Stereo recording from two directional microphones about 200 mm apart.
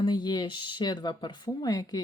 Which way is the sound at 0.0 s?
20° left (ahead or behind).